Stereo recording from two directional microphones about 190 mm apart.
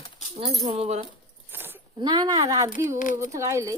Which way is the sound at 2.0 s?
20° right (ahead or behind).